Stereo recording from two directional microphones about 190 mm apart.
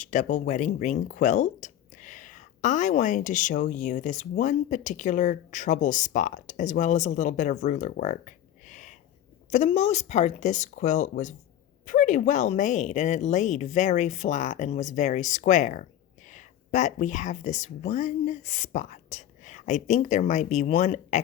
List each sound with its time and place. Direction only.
0.0 s speech: 40° left (ahead or behind)